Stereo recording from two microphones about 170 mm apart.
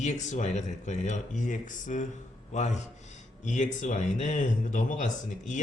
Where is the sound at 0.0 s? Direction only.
45° left (ahead or behind).